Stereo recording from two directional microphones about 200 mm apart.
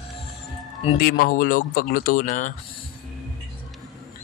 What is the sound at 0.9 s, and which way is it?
Speech, 45° left (ahead or behind).